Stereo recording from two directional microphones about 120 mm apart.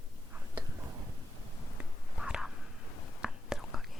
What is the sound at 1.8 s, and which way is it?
Whispering, 5° right (ahead or behind).